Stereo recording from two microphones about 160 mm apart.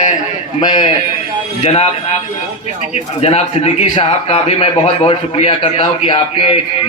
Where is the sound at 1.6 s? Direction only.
40° left (ahead or behind).